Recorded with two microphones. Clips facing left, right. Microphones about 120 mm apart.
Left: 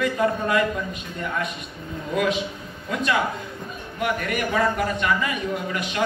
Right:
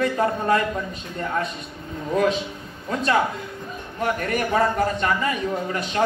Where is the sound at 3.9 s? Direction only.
35° right (ahead or behind).